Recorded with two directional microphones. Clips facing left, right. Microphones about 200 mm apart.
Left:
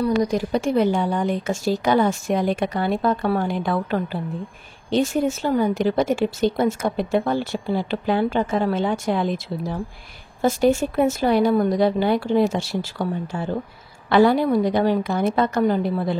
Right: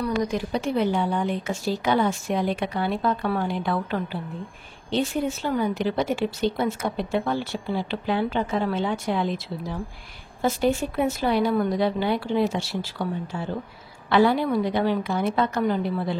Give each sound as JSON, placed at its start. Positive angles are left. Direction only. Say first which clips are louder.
{"t": 0.0, "sound": "a woman's voice", "louder": "left 5 dB", "side_deg": 35}
{"t": 14.0, "sound": "a woman's voice", "louder": "left 4 dB", "side_deg": 45}